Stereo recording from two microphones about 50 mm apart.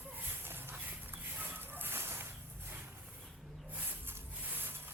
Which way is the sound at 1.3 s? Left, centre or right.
Right.